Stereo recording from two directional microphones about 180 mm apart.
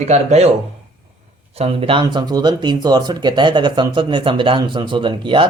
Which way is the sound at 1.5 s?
35° right (ahead or behind).